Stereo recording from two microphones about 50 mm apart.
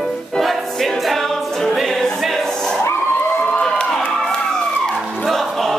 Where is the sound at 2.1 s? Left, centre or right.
Centre.